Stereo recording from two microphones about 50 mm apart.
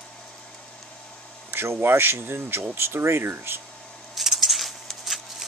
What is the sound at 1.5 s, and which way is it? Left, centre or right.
Speech, right.